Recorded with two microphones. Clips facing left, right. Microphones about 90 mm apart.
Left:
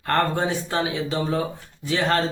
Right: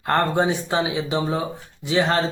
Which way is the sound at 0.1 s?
20° right (ahead or behind).